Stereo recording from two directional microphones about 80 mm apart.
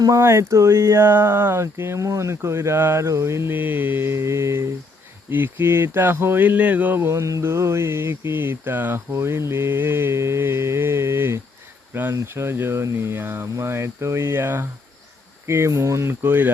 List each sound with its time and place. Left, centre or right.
0.2 s speech: right
5.3 s speech: right
7.1 s speech: right
15.4 s speech: right